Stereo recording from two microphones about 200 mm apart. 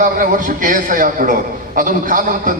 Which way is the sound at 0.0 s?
40° right (ahead or behind).